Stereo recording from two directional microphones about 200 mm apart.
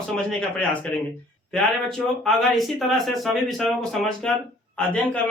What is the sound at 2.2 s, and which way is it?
Speech, centre (ahead or behind).